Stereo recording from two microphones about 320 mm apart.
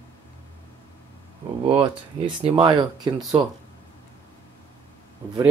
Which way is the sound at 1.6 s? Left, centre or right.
Centre.